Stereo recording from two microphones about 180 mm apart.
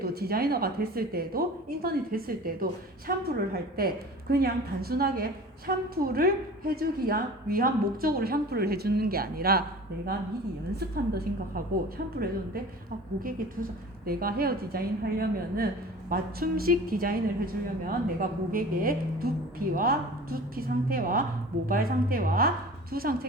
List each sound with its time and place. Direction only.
0.0 s a woman's voice: 60° right (ahead or behind)
10.8 s a woman's voice: 60° right (ahead or behind)